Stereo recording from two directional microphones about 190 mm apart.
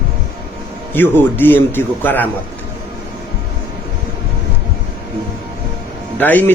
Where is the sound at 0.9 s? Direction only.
10° left (ahead or behind).